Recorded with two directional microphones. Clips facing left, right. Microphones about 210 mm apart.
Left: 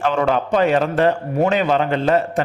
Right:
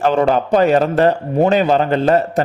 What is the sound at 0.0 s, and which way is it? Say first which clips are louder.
A man's voice: right 4 dB; 35° right (ahead or behind).